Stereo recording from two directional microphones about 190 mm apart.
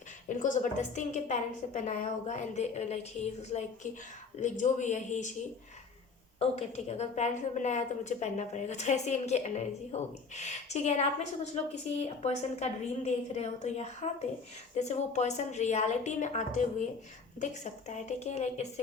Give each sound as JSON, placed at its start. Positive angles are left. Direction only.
{"t": 0.3, "sound": "a woman's voice", "side_deg": 40}
{"t": 6.4, "sound": "a woman's voice", "side_deg": 35}